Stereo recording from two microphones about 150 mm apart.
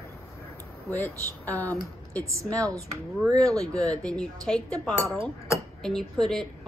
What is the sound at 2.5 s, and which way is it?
A woman's voice, 20° right (ahead or behind).